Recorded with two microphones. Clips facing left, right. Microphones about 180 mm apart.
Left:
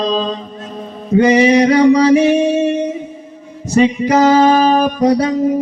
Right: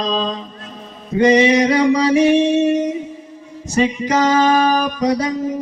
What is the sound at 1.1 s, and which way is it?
Music, 35° left (ahead or behind).